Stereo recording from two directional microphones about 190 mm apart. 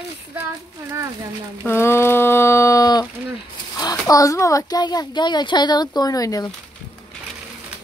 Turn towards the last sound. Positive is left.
turn(degrees=20)  # may be behind; listen again after turning